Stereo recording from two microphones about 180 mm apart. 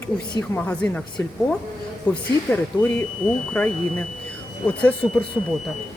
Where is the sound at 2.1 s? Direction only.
10° left (ahead or behind).